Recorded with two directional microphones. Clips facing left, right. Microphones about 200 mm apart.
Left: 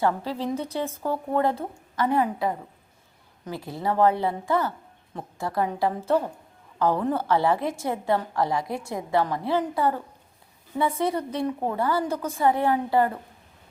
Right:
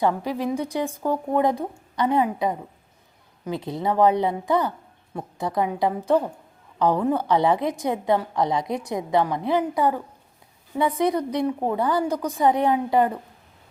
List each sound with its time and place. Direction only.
0.0 s a woman's voice: 15° right (ahead or behind)